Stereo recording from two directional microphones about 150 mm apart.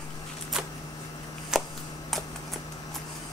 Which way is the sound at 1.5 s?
Centre (ahead or behind).